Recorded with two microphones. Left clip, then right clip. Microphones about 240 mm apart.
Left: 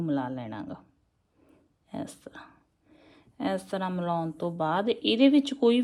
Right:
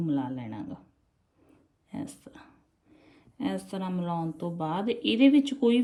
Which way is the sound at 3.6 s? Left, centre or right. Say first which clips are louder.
Left 4 dB; left.